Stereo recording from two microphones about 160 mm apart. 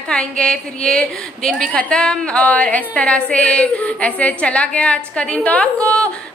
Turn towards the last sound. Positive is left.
turn(degrees=5)  # may be behind; listen again after turning